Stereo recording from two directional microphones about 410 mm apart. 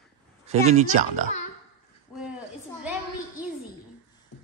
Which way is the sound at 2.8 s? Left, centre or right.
Centre.